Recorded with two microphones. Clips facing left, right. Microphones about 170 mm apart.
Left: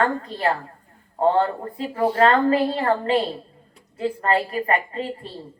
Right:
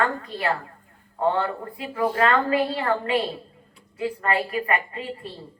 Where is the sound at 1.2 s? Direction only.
35° left (ahead or behind).